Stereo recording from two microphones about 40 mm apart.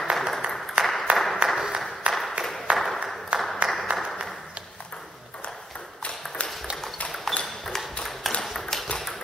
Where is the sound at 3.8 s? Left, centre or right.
Right.